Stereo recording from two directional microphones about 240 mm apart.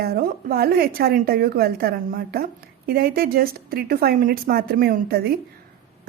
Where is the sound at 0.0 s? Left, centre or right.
Right.